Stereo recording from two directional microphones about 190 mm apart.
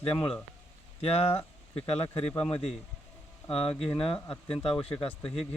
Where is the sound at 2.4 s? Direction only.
30° left (ahead or behind).